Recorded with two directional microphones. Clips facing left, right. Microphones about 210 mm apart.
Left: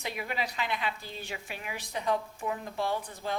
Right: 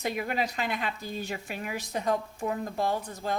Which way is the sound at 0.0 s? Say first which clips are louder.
Right 5 dB; 45° right (ahead or behind).